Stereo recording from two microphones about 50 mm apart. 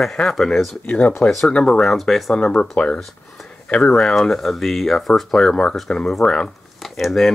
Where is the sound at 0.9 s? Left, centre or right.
Left.